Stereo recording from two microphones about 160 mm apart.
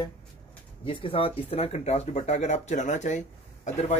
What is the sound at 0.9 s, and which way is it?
Speech, 35° left (ahead or behind).